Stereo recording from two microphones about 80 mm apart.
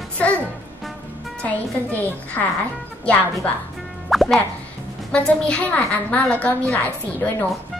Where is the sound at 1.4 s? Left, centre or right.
Centre.